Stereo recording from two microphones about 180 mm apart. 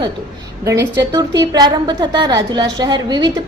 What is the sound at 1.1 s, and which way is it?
A woman's voice, 20° right (ahead or behind).